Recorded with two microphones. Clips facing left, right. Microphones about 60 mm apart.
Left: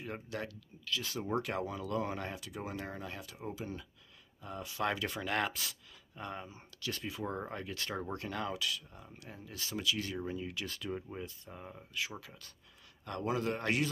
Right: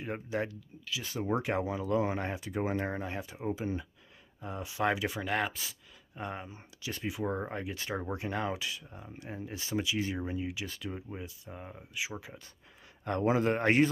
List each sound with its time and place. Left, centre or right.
0.0 s speech: right
0.8 s speech: centre
1.3 s speech: right; by 5.8 s centre
6.1 s speech: centre
6.7 s a sound: centre
7.1 s speech: centre
13.0 s speech: right